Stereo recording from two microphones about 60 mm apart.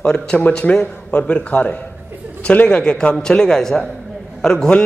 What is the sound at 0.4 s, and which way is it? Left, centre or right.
A man's voice, left.